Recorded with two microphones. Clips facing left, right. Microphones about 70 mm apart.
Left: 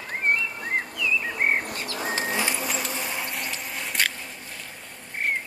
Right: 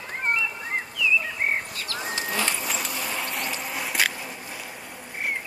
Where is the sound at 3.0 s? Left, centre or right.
Centre.